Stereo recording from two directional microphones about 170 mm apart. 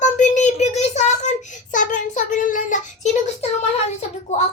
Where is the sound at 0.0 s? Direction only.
45° left (ahead or behind).